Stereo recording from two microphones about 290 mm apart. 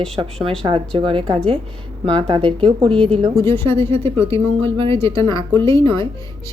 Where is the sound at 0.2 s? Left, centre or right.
Centre.